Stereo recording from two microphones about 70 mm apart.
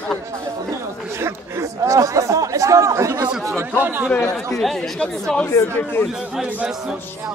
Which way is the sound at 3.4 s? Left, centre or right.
Right.